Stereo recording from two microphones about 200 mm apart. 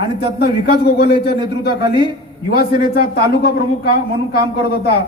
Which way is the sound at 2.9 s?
50° left (ahead or behind).